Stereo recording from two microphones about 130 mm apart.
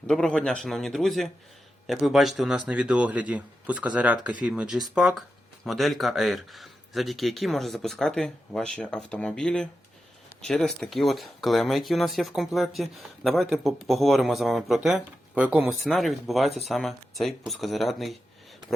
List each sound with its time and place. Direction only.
0.1 s speech: 5° left (ahead or behind); by 15.7 s 10° right (ahead or behind)
15.8 s speech: centre (ahead or behind)